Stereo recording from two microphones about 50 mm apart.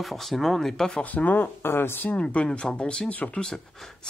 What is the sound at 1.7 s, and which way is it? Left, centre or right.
Speech, left.